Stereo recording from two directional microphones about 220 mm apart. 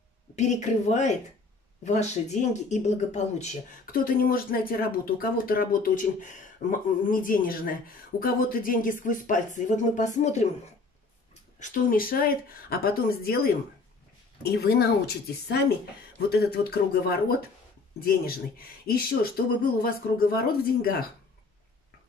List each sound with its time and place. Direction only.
0.4 s speech: 30° left (ahead or behind)